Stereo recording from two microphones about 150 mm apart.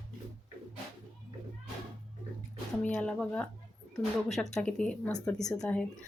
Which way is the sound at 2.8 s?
5° left (ahead or behind).